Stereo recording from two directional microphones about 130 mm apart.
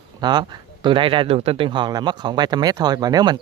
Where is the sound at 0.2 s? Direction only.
35° right (ahead or behind).